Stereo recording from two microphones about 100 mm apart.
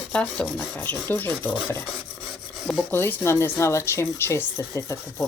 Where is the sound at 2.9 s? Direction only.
25° left (ahead or behind).